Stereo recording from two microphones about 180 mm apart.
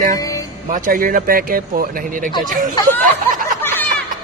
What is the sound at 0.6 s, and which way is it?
Speech, 50° right (ahead or behind).